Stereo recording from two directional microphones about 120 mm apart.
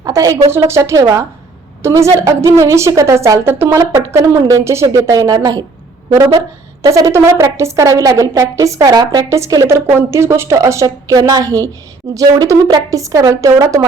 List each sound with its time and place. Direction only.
0.0 s a sound: 30° right (ahead or behind)
0.5 s speech: 20° right (ahead or behind)
6.8 s speech: 25° right (ahead or behind)